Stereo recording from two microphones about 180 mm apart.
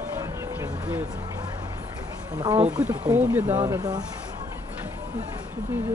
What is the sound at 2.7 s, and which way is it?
Speech, 5° right (ahead or behind).